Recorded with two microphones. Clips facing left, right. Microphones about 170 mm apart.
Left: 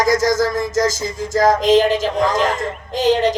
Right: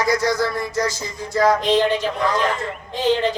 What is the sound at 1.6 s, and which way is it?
Speech, 90° left.